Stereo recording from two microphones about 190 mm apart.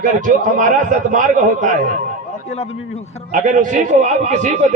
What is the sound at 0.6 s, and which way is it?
A man's voice, 40° right (ahead or behind).